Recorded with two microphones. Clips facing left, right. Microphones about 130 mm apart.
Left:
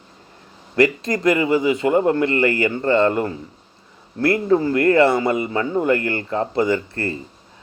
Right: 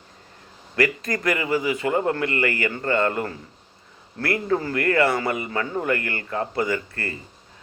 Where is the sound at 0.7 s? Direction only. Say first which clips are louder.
Left 5 dB; 25° left (ahead or behind).